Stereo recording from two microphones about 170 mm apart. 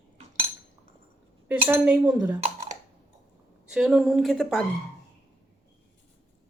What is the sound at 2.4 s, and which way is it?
Computer keyboard, 40° right (ahead or behind).